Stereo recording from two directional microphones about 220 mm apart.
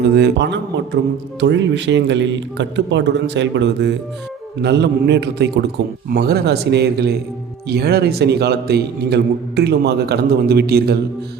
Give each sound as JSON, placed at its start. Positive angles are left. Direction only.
{"t": 0.0, "sound": "a man's voice", "side_deg": -50}